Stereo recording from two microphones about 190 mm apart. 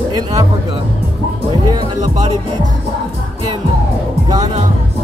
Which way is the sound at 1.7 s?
20° right (ahead or behind).